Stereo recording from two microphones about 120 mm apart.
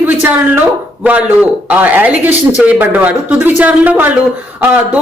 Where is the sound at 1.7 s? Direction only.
15° right (ahead or behind).